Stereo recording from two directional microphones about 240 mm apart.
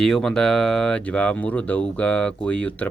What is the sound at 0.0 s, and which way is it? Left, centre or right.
Speech, centre.